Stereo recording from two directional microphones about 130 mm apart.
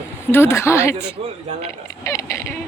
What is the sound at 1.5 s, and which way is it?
Speech, 60° right (ahead or behind).